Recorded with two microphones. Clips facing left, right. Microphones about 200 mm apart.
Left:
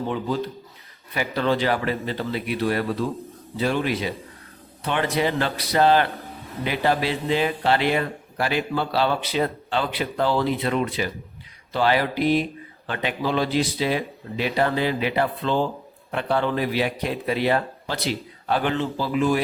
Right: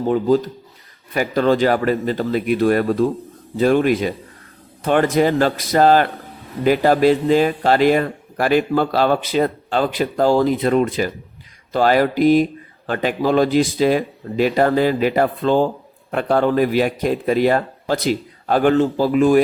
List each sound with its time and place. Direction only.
0.0 s speech: 45° right (ahead or behind)